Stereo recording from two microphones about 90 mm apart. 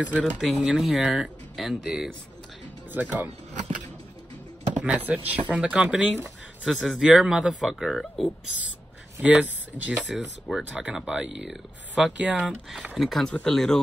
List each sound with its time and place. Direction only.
0.1 s speech: 5° left (ahead or behind)
2.9 s speech: 20° right (ahead or behind)
4.7 s speech: 15° right (ahead or behind); by 8.3 s centre (ahead or behind)
9.2 s speech: 15° right (ahead or behind)
12.9 s speech: centre (ahead or behind)